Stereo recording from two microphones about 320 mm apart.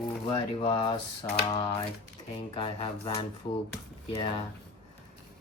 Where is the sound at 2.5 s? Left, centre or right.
Centre.